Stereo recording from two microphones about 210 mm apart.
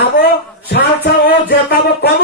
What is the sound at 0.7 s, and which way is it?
Music, 50° left (ahead or behind).